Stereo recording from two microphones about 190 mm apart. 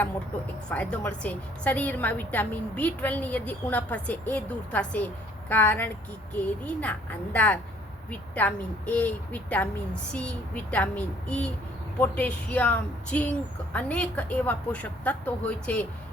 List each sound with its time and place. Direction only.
0.7 s a woman's voice: 5° left (ahead or behind)